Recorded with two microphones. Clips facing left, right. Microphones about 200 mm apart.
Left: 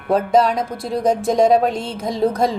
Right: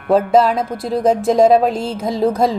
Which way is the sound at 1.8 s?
30° right (ahead or behind).